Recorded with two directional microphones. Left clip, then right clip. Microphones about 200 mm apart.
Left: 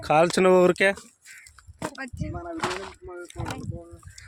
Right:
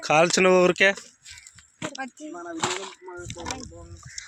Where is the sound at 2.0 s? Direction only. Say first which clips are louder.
Right 1 dB; 60° right (ahead or behind).